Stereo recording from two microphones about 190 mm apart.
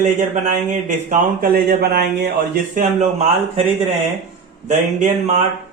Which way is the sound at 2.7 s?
40° right (ahead or behind).